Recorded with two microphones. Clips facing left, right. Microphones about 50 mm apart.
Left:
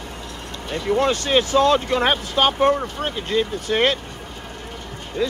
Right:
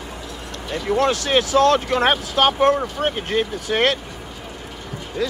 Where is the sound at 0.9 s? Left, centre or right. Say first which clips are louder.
Even; centre.